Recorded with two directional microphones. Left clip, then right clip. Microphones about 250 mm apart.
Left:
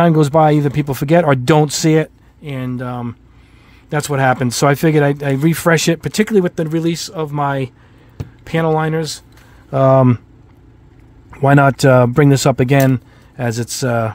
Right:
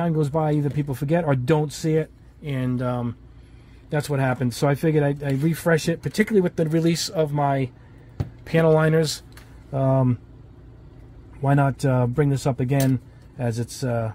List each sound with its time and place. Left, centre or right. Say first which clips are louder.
0.0 s speech: left 12 dB; left
2.4 s speech: left 2 dB; centre
3.9 s speech: left 9 dB; left
7.3 s speech: left 4 dB; left; by 9.2 s centre
9.7 s speech: left 11 dB; left
11.3 s speech: left 11 dB; left